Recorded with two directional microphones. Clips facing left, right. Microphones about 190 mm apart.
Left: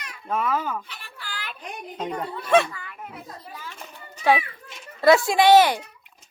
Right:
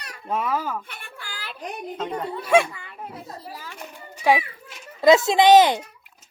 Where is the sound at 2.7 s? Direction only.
25° right (ahead or behind).